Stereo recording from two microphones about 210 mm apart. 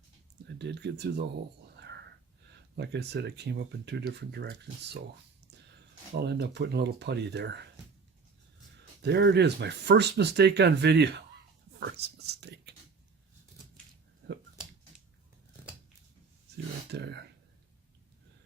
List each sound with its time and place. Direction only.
0.6 s speech: 55° right (ahead or behind)
1.7 s whispering: 55° right (ahead or behind)
2.7 s speech: 55° right (ahead or behind)
6.1 s speech: 50° right (ahead or behind)
9.0 s speech: 50° right (ahead or behind)
14.2 s a sound: 50° right (ahead or behind)
16.9 s speech: 55° right (ahead or behind)